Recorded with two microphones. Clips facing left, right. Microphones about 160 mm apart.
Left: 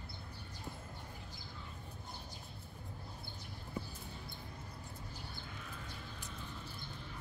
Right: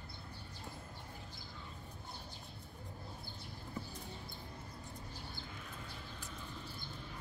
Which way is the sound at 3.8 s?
10° left (ahead or behind).